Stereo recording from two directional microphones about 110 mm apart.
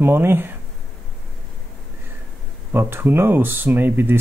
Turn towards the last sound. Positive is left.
turn(degrees=-20)  # may be behind; listen again after turning